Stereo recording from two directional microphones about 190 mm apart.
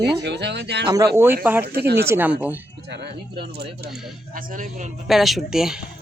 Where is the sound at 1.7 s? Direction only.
55° right (ahead or behind).